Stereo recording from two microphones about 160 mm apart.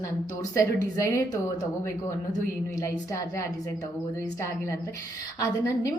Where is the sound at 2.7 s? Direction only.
20° left (ahead or behind).